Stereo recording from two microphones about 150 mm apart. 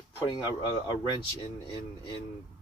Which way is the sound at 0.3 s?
30° left (ahead or behind).